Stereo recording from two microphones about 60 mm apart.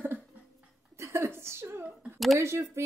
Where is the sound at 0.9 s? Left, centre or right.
Right.